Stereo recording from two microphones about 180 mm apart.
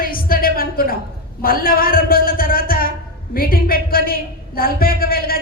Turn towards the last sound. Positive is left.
turn(degrees=55)  # may be behind; listen again after turning